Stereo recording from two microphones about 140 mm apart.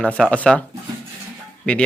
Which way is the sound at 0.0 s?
10° left (ahead or behind).